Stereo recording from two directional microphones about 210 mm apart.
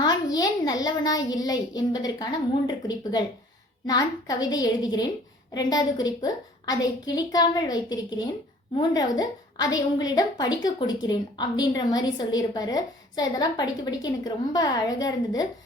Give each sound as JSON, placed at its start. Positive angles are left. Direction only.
{"t": 0.0, "sound": "a child's voice", "side_deg": 20}